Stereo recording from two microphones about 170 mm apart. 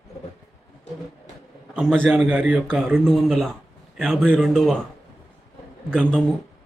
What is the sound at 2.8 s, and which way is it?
Speech, 5° left (ahead or behind).